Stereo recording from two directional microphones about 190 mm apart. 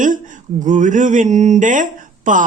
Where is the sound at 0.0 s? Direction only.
45° right (ahead or behind).